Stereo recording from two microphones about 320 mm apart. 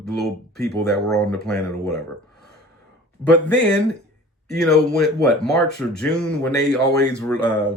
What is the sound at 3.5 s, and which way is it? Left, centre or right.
Speech, centre.